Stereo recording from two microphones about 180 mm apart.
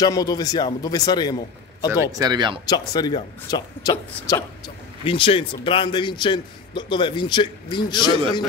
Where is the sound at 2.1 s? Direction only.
20° right (ahead or behind).